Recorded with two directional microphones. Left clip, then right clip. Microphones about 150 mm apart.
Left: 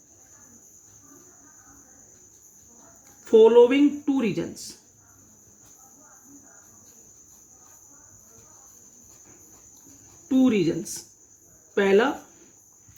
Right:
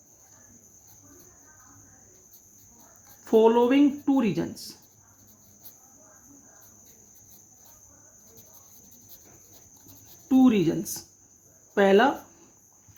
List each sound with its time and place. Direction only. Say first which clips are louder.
3.2 s speech: left 5 dB; 75° right (ahead or behind)
10.2 s speech: even; 75° right (ahead or behind)